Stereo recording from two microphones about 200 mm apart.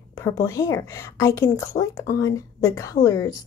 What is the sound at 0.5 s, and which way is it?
A woman's voice, 15° left (ahead or behind).